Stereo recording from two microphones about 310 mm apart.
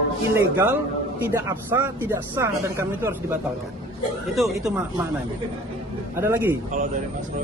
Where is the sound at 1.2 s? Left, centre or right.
Centre.